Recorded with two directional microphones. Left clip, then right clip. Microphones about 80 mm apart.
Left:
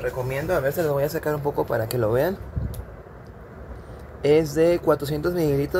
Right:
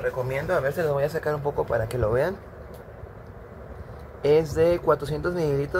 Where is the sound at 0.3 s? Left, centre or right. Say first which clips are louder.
Left 3 dB; left.